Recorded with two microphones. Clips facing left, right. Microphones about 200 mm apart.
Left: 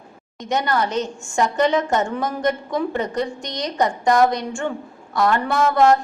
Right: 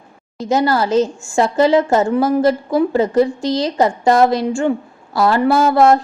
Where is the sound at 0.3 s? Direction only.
35° right (ahead or behind).